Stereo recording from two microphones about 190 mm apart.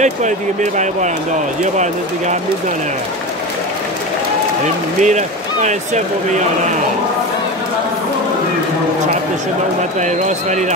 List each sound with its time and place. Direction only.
0.0 s speech: 40° right (ahead or behind)
5.0 s speech: 40° right (ahead or behind)
10.0 s speech: 40° right (ahead or behind)